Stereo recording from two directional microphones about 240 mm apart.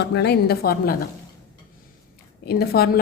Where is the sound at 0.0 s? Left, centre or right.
Left.